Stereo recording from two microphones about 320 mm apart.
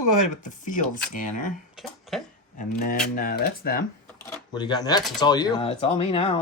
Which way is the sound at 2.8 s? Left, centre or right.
Left.